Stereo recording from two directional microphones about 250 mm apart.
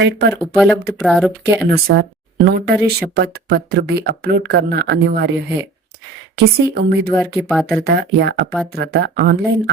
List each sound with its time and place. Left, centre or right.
0.0 s speech: right
0.5 s speech: centre
1.7 s speech: right
6.3 s speech: right
7.3 s speech: centre
7.9 s speech: right